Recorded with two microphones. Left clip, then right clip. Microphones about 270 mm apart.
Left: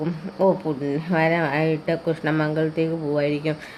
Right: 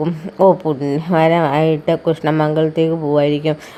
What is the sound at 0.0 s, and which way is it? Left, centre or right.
A woman's voice, right.